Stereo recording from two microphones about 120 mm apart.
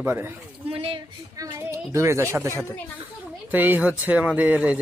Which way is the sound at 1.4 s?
25° right (ahead or behind).